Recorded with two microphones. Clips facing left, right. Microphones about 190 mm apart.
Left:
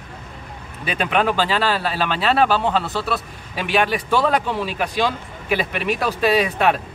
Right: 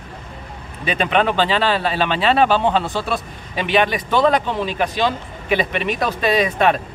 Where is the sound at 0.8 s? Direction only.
5° left (ahead or behind).